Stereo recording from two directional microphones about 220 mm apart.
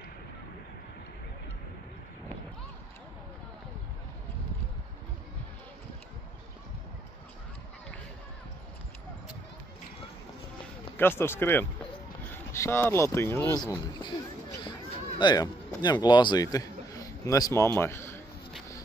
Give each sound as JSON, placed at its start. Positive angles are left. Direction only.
{"t": 11.0, "sound": "speech", "side_deg": 10}
{"t": 15.1, "sound": "a man's voice", "side_deg": 20}